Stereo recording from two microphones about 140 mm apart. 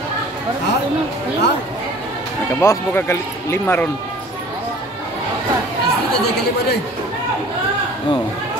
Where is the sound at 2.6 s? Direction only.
15° left (ahead or behind).